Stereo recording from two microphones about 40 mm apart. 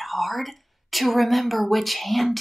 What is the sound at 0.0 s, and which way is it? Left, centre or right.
A woman's voice, centre.